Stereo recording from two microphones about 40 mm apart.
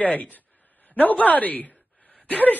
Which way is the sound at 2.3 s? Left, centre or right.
Left.